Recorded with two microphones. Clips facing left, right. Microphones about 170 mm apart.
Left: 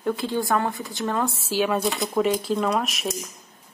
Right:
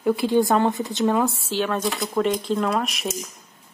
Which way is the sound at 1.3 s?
5° left (ahead or behind).